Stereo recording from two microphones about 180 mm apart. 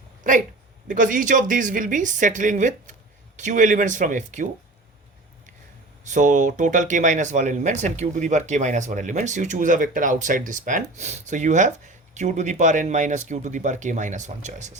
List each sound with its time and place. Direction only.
0.9 s speech: 50° right (ahead or behind)
6.1 s speech: 45° right (ahead or behind)